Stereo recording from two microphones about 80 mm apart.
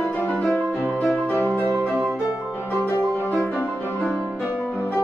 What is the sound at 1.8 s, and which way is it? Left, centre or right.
Music, centre.